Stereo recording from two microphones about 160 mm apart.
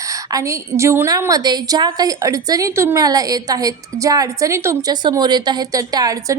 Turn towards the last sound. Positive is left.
turn(degrees=-25)  # may be behind; listen again after turning